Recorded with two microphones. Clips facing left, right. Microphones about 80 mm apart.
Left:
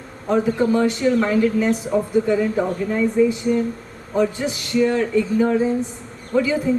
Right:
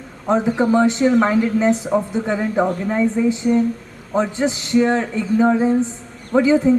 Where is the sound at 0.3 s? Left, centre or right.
Right.